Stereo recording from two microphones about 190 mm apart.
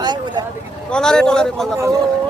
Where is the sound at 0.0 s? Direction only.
20° right (ahead or behind).